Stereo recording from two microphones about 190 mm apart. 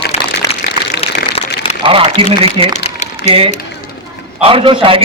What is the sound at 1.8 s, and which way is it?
A man's voice, 25° right (ahead or behind).